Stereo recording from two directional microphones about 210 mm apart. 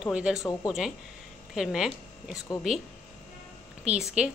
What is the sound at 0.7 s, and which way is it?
A woman's voice, centre (ahead or behind).